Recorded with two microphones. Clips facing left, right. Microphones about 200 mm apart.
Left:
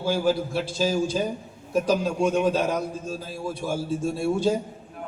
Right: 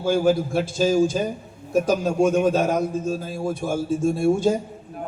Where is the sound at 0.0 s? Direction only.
50° right (ahead or behind).